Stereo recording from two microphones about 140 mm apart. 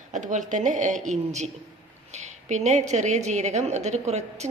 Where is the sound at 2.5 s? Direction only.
55° right (ahead or behind).